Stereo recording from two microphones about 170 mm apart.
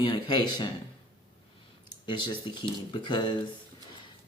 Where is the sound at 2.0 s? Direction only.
25° left (ahead or behind).